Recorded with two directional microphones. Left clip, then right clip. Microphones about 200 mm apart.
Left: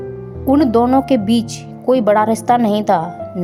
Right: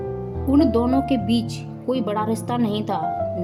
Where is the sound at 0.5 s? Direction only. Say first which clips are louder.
Left 6 dB; 45° left (ahead or behind).